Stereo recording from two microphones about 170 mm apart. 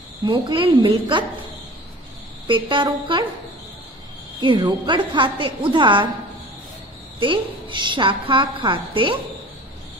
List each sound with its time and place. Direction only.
0.2 s a woman's voice: 30° right (ahead or behind)
2.4 s a woman's voice: 30° right (ahead or behind)
4.4 s a woman's voice: 30° right (ahead or behind)
7.2 s a woman's voice: 30° right (ahead or behind)